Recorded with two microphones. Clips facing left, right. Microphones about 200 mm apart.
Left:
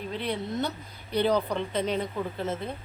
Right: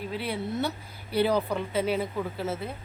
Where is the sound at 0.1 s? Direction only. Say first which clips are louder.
Left 1 dB; 5° right (ahead or behind).